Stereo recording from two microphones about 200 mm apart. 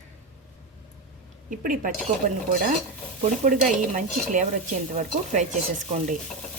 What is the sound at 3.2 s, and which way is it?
A woman's voice, 40° right (ahead or behind).